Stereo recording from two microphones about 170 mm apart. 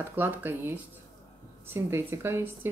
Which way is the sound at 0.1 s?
10° right (ahead or behind).